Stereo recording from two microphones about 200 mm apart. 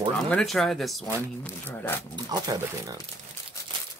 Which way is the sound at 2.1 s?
20° right (ahead or behind).